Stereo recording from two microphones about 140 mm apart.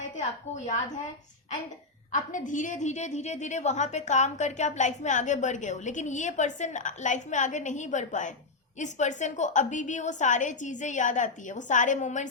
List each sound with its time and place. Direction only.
0.2 s a woman's voice: 60° left (ahead or behind)
2.1 s a woman's voice: 65° left (ahead or behind)